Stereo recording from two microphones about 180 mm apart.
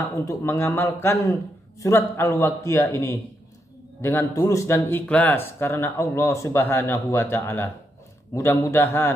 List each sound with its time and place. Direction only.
0.1 s speech: 15° left (ahead or behind)